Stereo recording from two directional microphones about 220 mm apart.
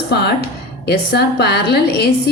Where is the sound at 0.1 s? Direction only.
50° left (ahead or behind).